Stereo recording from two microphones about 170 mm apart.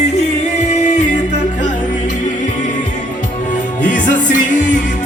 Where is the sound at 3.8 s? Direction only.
50° left (ahead or behind).